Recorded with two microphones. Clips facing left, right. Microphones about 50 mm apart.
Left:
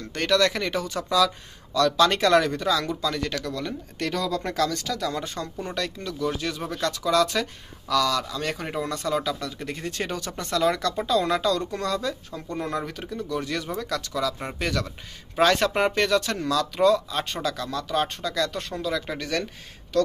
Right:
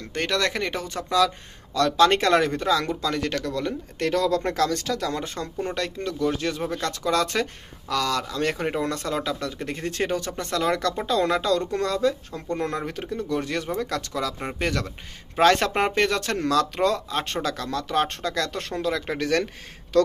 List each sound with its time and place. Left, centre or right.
0.1 s speech: right
3.0 s speech: right
3.5 s speech: right
9.1 s speech: right
18.9 s speech: right
19.1 s speech: right